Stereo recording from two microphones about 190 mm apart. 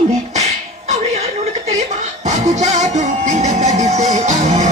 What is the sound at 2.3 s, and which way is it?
Music, 40° right (ahead or behind).